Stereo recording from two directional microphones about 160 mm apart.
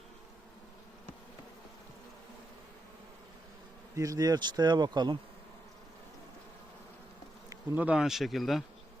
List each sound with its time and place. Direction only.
3.9 s speech: 20° right (ahead or behind)
7.8 s speech: 5° right (ahead or behind)